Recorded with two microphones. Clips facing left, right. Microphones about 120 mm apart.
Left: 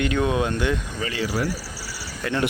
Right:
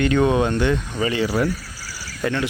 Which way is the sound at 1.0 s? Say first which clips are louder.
Right 8 dB; 20° right (ahead or behind).